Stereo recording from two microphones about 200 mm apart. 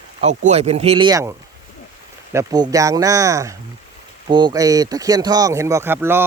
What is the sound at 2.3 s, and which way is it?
A man's voice, 20° right (ahead or behind).